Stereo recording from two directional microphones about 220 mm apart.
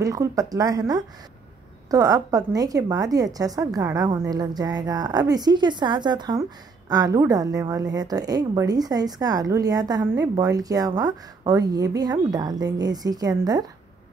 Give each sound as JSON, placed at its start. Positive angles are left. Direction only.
{"t": 0.0, "sound": "a woman's voice", "side_deg": -15}